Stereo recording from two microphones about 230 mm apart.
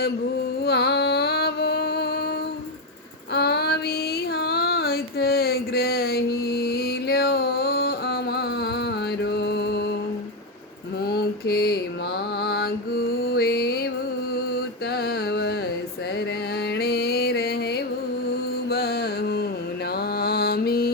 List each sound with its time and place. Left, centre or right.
0.6 s music: left
3.3 s female singing: left
4.4 s a sound: left
11.0 s mantra: left
16.7 s music: left
18.7 s mantra: left